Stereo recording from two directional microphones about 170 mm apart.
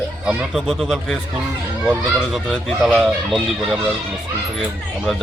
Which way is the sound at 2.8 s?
Centre (ahead or behind).